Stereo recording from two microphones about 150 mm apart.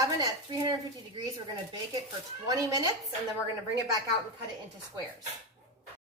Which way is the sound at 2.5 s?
20° right (ahead or behind).